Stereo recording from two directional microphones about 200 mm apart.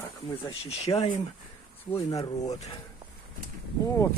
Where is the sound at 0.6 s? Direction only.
30° left (ahead or behind).